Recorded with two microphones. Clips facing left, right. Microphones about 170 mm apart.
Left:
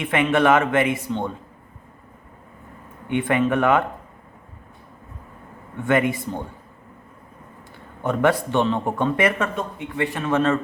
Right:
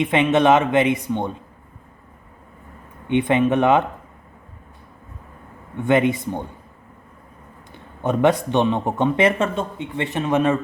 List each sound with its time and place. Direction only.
0.0 s speech: 20° right (ahead or behind)
3.1 s speech: 20° right (ahead or behind)
5.8 s speech: 20° right (ahead or behind)
8.0 s speech: 20° right (ahead or behind)